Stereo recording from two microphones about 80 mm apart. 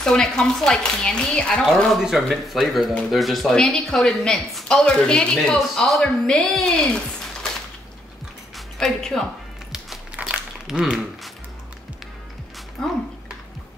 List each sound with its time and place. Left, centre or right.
0.0 s a woman's voice: centre
2.0 s a woman's voice: centre
8.5 s speech: centre
10.1 s a sound: centre
10.7 s speech: centre
12.8 s speech: centre